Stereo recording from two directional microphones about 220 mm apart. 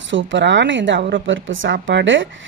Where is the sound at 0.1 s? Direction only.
55° right (ahead or behind).